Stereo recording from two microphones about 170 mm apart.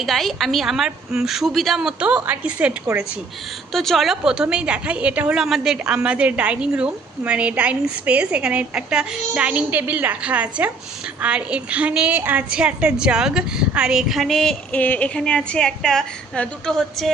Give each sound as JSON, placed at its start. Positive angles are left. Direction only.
{"t": 0.0, "sound": "a woman's voice", "side_deg": 0}